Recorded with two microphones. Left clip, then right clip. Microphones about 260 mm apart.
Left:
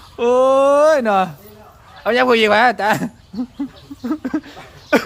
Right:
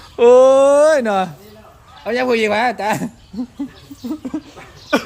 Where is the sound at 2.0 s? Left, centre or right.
Centre.